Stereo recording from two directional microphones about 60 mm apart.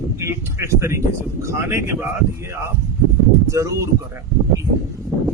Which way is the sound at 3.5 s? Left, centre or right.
Right.